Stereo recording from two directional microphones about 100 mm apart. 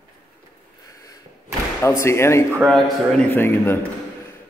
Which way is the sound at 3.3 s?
20° left (ahead or behind).